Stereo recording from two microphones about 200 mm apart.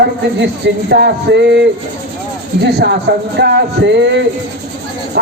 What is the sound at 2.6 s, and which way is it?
Speech, 55° right (ahead or behind).